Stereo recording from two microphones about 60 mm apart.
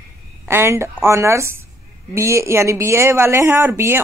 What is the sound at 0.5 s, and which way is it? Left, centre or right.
Speech, right.